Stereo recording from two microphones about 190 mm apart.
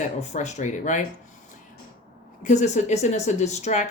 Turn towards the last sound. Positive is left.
turn(degrees=35)  # may be behind; listen again after turning